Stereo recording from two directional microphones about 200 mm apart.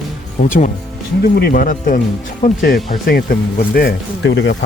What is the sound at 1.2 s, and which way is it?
Speech, 50° left (ahead or behind).